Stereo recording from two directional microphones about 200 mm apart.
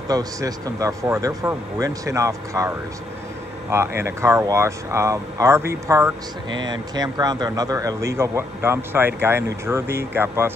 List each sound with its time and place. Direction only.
0.1 s speech: 20° right (ahead or behind)
3.7 s speech: 10° right (ahead or behind)